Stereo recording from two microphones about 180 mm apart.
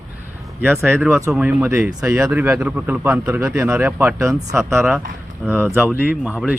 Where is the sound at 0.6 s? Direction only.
10° right (ahead or behind).